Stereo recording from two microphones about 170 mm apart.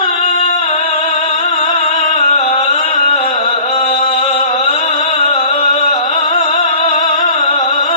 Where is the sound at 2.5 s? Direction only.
40° left (ahead or behind).